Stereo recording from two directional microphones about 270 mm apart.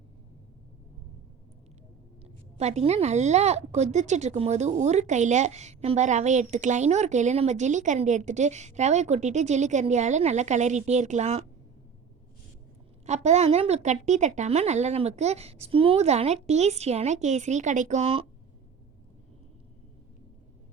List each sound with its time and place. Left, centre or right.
2.2 s a woman's voice: right
13.1 s a woman's voice: right